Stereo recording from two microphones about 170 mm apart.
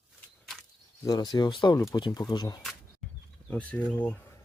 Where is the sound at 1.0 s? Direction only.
25° left (ahead or behind).